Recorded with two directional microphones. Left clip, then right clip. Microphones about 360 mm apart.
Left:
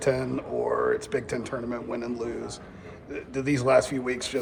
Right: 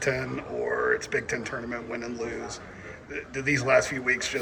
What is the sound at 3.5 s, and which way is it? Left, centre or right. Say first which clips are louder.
Speech: left 1 dB; centre.